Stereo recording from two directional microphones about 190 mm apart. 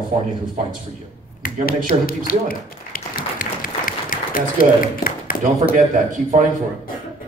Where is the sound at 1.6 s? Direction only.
50° left (ahead or behind).